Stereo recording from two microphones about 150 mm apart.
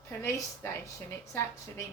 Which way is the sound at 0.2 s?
20° left (ahead or behind).